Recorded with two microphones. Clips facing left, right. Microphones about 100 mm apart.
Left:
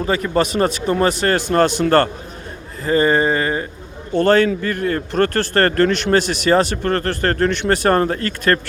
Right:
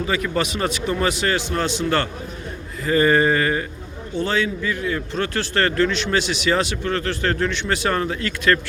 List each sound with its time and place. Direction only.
0.0 s a man's voice: 35° left (ahead or behind)
2.8 s a sound: 30° left (ahead or behind)
4.1 s a man's voice: 55° left (ahead or behind)